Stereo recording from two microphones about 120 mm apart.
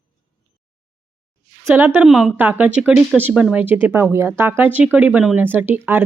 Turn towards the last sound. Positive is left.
turn(degrees=-15)  # may be behind; listen again after turning